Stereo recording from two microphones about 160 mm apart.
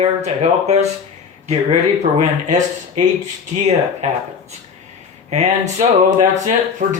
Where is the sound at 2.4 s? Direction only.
50° right (ahead or behind).